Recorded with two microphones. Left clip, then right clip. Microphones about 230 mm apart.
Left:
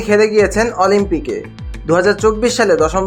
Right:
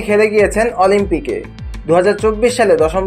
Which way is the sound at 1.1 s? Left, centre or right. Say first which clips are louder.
Right 1 dB; centre.